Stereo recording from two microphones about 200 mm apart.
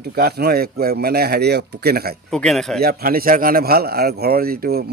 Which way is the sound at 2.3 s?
Centre (ahead or behind).